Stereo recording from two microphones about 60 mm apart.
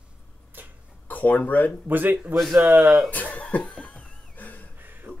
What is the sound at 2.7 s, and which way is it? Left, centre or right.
Speech, centre.